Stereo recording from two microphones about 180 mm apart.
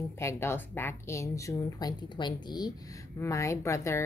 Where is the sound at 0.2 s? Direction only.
15° left (ahead or behind).